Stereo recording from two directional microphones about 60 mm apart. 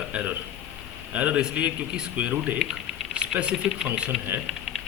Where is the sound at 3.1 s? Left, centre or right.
Centre.